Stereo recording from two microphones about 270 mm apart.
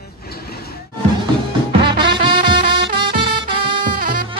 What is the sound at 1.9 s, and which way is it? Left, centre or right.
Music, centre.